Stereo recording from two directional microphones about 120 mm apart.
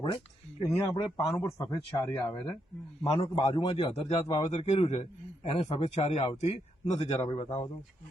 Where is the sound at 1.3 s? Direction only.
25° left (ahead or behind).